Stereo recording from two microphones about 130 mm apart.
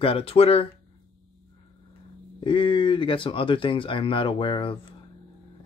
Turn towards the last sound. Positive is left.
turn(degrees=40)  # may be behind; listen again after turning